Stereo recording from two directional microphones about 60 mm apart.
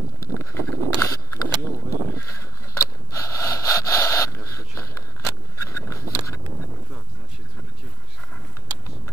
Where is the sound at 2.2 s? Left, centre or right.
Left.